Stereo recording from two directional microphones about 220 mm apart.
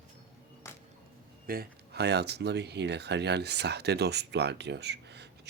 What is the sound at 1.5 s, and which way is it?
Speech, 45° right (ahead or behind).